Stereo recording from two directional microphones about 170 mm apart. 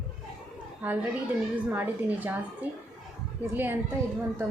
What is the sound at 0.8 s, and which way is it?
A woman's voice, 10° right (ahead or behind).